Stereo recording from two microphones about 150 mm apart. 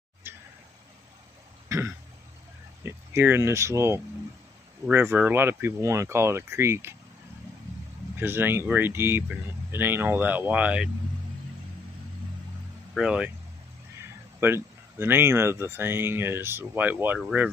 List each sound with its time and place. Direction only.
0.2 s a sound: 15° right (ahead or behind)
2.8 s speech: 15° right (ahead or behind)
8.2 s speech: 15° right (ahead or behind)
12.9 s speech: 5° right (ahead or behind)
14.4 s speech: 15° right (ahead or behind)